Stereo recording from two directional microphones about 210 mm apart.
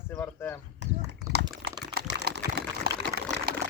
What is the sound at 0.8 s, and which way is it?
Speech, 55° right (ahead or behind).